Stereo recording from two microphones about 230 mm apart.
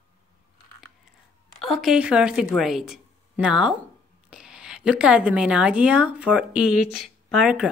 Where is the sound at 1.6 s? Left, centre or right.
Centre.